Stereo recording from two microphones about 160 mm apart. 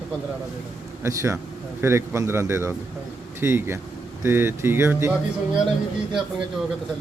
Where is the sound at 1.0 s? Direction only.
15° right (ahead or behind).